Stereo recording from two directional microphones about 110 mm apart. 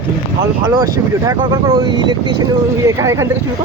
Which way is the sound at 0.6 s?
30° right (ahead or behind).